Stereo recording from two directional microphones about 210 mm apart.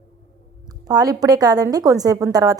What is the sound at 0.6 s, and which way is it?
A woman's voice, 20° right (ahead or behind).